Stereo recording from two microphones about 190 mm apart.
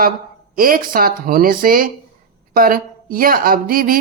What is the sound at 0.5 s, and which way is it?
Speech, 50° right (ahead or behind).